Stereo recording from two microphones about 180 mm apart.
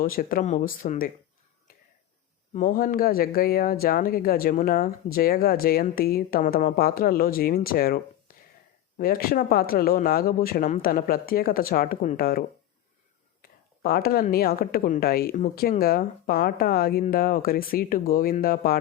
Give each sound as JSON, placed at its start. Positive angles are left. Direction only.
{"t": 0.0, "sound": "speech", "side_deg": 50}
{"t": 2.6, "sound": "a woman's voice", "side_deg": 55}